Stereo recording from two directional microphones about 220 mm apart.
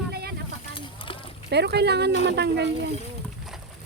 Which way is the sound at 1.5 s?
50° right (ahead or behind).